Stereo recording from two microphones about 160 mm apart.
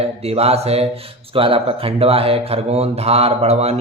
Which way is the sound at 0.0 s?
40° right (ahead or behind).